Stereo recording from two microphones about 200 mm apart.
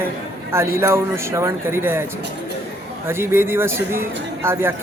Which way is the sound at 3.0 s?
10° right (ahead or behind).